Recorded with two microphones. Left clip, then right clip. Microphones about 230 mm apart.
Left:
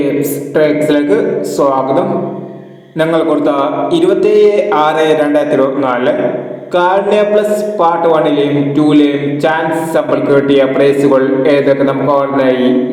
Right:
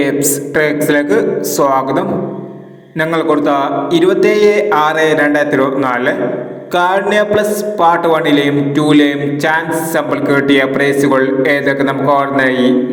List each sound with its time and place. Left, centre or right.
0.5 s a man's voice: right